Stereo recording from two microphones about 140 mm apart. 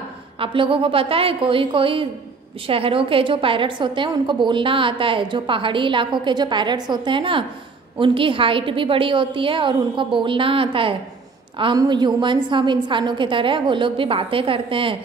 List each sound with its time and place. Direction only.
0.4 s a woman's voice: 40° right (ahead or behind)